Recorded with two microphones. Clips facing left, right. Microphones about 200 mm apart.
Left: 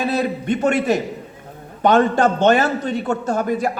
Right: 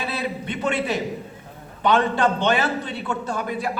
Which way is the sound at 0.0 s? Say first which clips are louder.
Left 7 dB; 45° left (ahead or behind).